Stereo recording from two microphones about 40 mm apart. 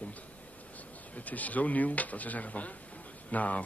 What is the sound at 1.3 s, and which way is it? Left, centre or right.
A man's voice, left.